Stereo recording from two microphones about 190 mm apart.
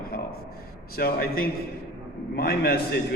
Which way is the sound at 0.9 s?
55° left (ahead or behind).